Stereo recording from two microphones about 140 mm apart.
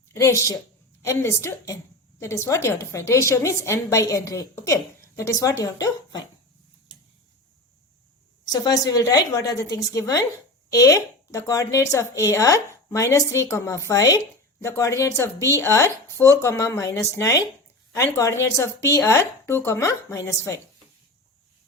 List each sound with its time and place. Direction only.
0.1 s a woman's voice: 20° left (ahead or behind)
8.4 s speech: 25° left (ahead or behind)